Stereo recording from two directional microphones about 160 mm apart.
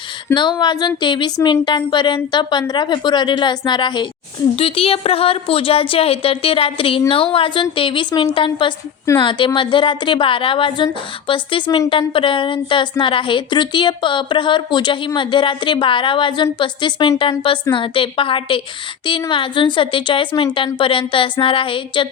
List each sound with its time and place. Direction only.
0.3 s a woman's voice: 30° left (ahead or behind)